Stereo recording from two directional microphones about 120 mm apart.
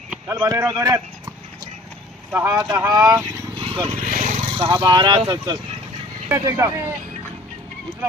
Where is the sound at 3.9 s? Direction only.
90° right.